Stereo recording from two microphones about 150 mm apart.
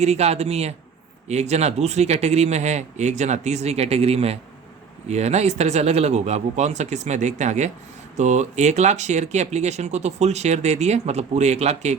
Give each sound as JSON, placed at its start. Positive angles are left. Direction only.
{"t": 0.0, "sound": "speech", "side_deg": -45}